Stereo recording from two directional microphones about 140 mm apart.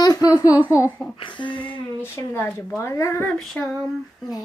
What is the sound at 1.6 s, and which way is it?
Speech, 15° left (ahead or behind).